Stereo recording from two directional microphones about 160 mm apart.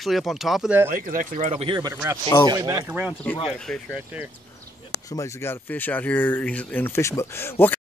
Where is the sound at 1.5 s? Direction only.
35° right (ahead or behind).